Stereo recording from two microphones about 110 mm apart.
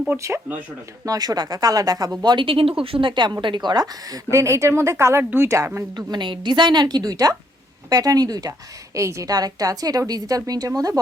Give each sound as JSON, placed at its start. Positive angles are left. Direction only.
{"t": 0.2, "sound": "speech", "side_deg": -25}
{"t": 6.1, "sound": "speech", "side_deg": -45}